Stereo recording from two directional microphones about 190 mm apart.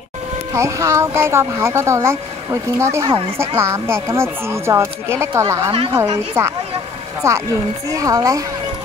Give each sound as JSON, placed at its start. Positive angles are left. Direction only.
{"t": 0.5, "sound": "speech", "side_deg": -15}